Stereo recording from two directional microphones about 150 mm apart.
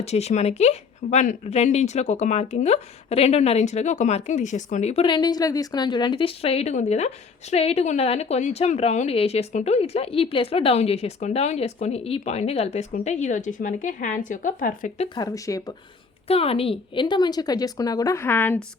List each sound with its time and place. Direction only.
0.0 s speech: 45° left (ahead or behind)
5.0 s a woman's voice: 30° left (ahead or behind); by 14.9 s 65° left (ahead or behind)
15.1 s speech: 25° left (ahead or behind)
16.2 s speech: 40° left (ahead or behind); by 18.6 s 15° left (ahead or behind)